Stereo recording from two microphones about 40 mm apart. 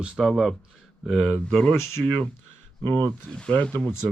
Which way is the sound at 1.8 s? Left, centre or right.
Left.